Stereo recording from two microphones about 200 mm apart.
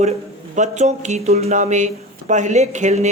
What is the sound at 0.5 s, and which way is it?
Speech, 35° right (ahead or behind).